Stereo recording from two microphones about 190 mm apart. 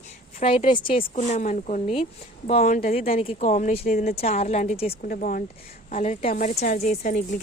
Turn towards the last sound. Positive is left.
turn(degrees=40)  # may be behind; listen again after turning